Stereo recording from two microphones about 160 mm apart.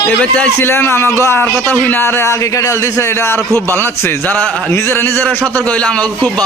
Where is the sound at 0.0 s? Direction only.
10° left (ahead or behind).